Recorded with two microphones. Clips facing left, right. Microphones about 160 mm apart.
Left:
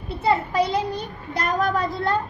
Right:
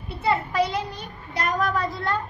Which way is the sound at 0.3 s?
35° left (ahead or behind).